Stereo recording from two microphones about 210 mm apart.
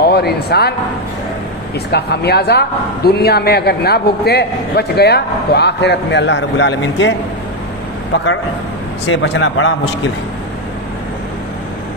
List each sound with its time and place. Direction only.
0.0 s speech: 50° left (ahead or behind)
1.9 s a man's voice: 50° left (ahead or behind)
9.0 s speech: 60° left (ahead or behind)